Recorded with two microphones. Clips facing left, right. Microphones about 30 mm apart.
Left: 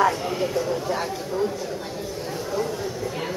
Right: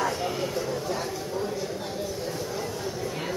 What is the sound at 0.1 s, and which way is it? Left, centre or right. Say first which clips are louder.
Speech: left 4 dB; centre.